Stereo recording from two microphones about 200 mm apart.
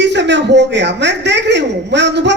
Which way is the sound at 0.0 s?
60° right (ahead or behind).